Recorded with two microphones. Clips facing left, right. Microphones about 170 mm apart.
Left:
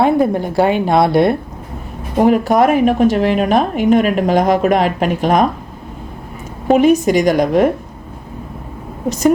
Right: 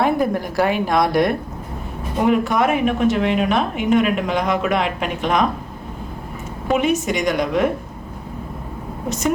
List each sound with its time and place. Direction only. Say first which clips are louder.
0.0 s a woman's voice: left 5 dB; 30° left (ahead or behind)
6.7 s a woman's voice: left 8 dB; 35° left (ahead or behind)